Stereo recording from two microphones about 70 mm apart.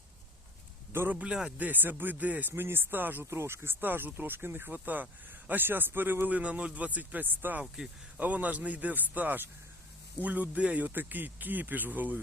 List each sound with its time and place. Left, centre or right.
1.1 s speech: centre
2.5 s speech: right
3.2 s speech: right